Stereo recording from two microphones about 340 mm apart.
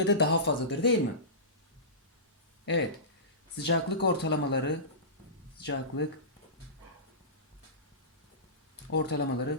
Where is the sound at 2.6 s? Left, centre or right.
Left.